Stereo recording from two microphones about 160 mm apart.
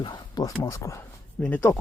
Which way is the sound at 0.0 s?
25° left (ahead or behind).